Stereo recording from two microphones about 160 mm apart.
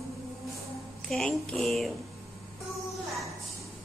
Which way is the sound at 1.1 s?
5° left (ahead or behind).